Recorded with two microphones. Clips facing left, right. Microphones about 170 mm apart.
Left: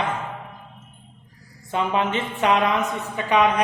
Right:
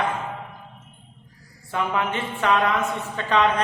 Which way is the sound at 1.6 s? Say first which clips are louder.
Left 2 dB; 20° left (ahead or behind).